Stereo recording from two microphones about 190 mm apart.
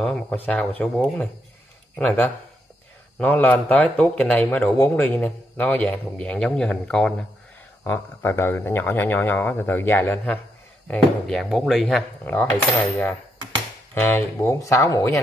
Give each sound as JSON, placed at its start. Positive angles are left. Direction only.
{"t": 0.0, "sound": "speech", "side_deg": 5}
{"t": 14.0, "sound": "speech", "side_deg": 15}